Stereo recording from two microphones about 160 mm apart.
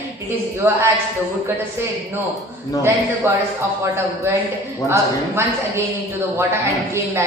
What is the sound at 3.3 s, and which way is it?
Speech, 15° right (ahead or behind).